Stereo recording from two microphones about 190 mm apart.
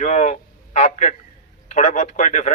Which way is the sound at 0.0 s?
35° left (ahead or behind).